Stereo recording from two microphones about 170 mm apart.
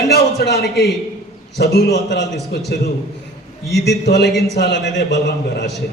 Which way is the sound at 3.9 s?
70° left (ahead or behind).